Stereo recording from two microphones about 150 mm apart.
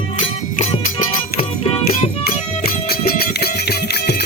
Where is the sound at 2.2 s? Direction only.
90° left.